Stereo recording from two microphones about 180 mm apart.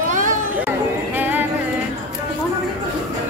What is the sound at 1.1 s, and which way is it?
Music, 10° right (ahead or behind).